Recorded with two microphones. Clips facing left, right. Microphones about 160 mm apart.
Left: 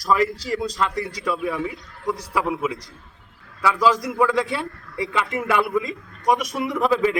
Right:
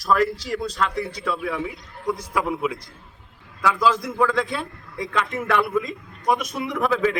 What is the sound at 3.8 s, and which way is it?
A man's voice, 10° left (ahead or behind).